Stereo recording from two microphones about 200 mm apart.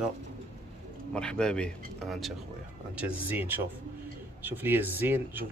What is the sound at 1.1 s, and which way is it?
Speech, 5° left (ahead or behind).